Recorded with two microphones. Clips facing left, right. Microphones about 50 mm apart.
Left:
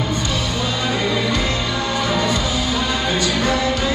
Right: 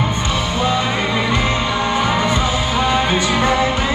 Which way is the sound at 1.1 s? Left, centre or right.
Right.